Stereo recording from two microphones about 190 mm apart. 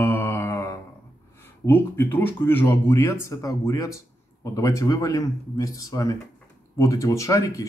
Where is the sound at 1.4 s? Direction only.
10° left (ahead or behind).